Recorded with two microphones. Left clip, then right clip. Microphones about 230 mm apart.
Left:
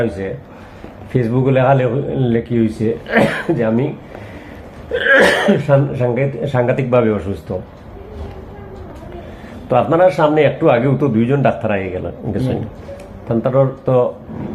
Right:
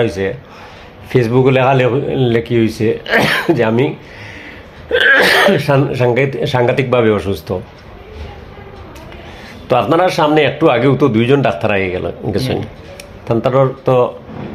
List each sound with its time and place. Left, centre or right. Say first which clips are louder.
1.1 s speech: right 4 dB; right
4.9 s speech: right 2 dB; right
9.6 s a man's voice: even; right